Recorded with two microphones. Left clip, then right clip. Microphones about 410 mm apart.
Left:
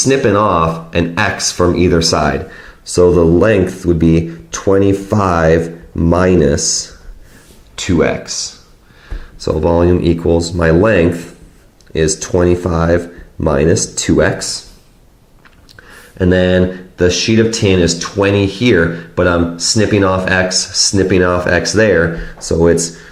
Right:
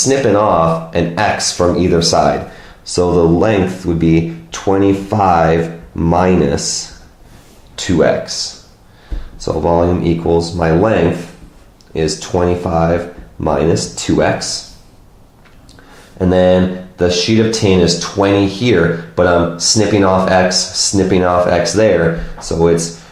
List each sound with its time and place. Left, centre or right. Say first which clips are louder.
0.0 s speech: even; left
11.9 s speech: left 2 dB; left
16.1 s speech: right 1 dB; left